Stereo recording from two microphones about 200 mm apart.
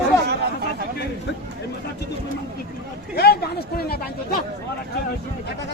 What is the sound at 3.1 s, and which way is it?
Speech, 50° left (ahead or behind).